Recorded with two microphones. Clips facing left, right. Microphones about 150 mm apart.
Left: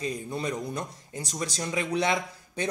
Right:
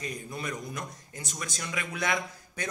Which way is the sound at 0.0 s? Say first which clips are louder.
Left 5 dB; 30° left (ahead or behind).